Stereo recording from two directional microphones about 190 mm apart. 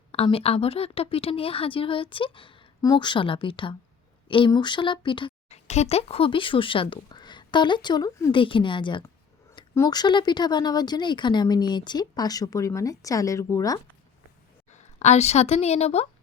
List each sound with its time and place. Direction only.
0.1 s speech: 30° left (ahead or behind)
14.7 s a woman's voice: 35° left (ahead or behind)